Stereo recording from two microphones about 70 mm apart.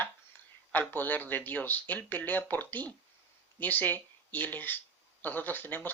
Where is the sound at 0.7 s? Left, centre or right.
Left.